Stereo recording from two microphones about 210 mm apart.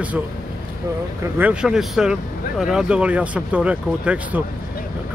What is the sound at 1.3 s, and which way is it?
Speech, 5° right (ahead or behind).